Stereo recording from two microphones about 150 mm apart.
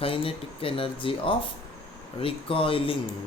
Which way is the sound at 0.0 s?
40° left (ahead or behind).